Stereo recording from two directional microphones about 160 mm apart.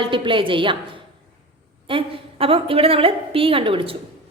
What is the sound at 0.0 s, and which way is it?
Speech, 30° right (ahead or behind).